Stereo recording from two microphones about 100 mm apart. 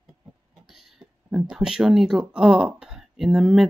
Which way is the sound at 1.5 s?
5° right (ahead or behind).